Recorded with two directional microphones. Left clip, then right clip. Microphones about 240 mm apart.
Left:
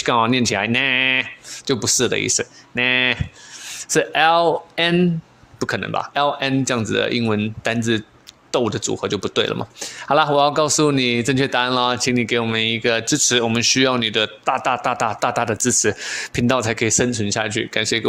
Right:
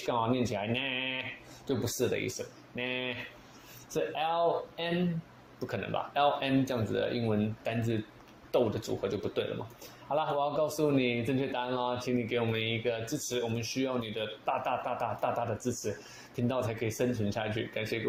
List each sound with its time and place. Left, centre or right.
0.1 s speech: left